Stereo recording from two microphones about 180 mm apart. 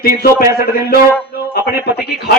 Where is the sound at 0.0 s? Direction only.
55° left (ahead or behind).